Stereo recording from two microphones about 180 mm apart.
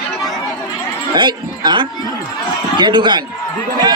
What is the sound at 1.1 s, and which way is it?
Speech, 25° right (ahead or behind).